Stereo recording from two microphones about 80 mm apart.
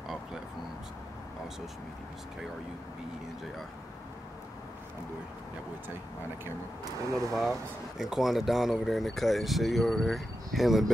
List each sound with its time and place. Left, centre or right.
6.8 s speech: right
8.0 s speech: centre